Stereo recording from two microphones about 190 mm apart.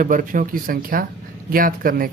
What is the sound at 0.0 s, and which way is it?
Speech, 45° right (ahead or behind).